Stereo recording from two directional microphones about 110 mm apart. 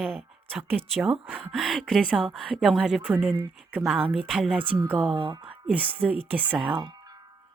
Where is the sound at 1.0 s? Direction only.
5° right (ahead or behind).